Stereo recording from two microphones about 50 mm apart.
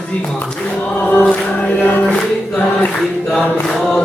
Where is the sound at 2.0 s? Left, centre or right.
Left.